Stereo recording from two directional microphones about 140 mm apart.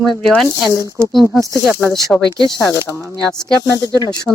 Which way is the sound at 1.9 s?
Centre (ahead or behind).